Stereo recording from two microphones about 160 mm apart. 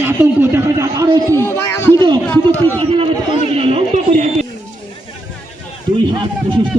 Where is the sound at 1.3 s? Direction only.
15° left (ahead or behind).